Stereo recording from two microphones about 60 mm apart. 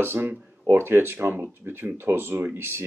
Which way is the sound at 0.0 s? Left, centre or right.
Right.